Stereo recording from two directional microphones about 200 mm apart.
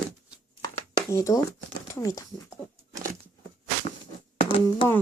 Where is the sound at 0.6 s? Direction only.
15° left (ahead or behind).